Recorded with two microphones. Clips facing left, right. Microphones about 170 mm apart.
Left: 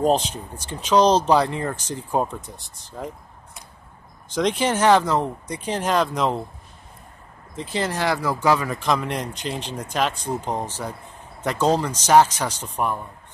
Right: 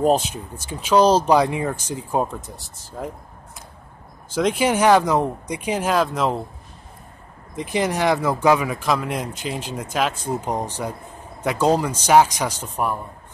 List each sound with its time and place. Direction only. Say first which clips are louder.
0.0 s speech: right 1 dB; 10° right (ahead or behind)
4.3 s speech: right 2 dB; 5° right (ahead or behind)
7.5 s speech: right 3 dB; 15° right (ahead or behind)